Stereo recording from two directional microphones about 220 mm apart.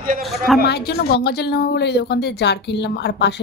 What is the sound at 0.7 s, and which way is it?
Speech, 45° left (ahead or behind).